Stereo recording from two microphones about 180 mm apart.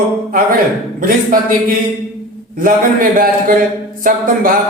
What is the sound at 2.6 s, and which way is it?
Speech, 50° right (ahead or behind).